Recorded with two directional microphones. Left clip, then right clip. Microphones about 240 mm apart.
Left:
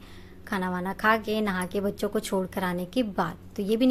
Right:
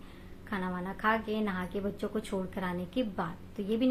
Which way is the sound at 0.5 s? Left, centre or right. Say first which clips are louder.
Left 7 dB; left.